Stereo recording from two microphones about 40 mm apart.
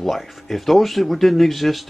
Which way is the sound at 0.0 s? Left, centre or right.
Centre.